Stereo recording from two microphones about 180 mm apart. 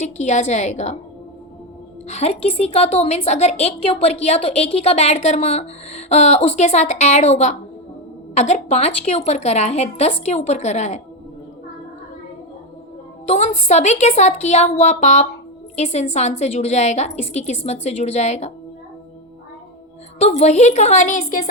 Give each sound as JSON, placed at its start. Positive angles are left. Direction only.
{"t": 0.0, "sound": "a woman's voice", "side_deg": 40}
{"t": 2.0, "sound": "a woman's voice", "side_deg": 35}
{"t": 13.2, "sound": "a woman's voice", "side_deg": 35}
{"t": 20.1, "sound": "a woman's voice", "side_deg": 35}